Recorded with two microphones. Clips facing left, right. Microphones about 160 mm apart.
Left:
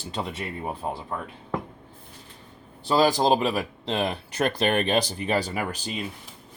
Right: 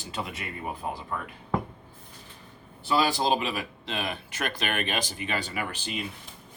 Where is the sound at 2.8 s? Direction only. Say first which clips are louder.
Left 5 dB; 35° left (ahead or behind).